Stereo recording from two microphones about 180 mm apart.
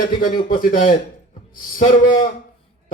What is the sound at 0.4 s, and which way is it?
Speech, 50° left (ahead or behind).